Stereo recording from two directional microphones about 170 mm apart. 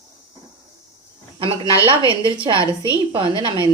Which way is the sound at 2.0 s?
30° right (ahead or behind).